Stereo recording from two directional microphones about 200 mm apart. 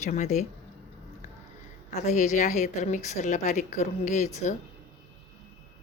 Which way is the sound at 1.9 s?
35° left (ahead or behind).